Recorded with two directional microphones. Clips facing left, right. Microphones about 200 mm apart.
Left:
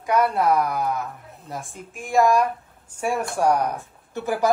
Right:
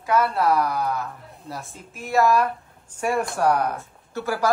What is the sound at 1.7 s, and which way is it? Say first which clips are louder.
Speech: left 1 dB; 50° left (ahead or behind).